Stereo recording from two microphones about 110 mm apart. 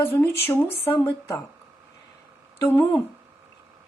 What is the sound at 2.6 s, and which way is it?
Speech, 20° left (ahead or behind).